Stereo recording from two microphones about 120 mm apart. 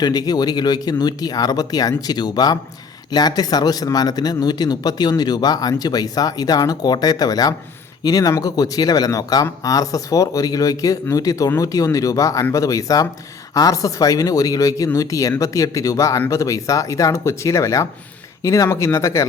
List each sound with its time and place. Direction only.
0.0 s speech: 35° left (ahead or behind)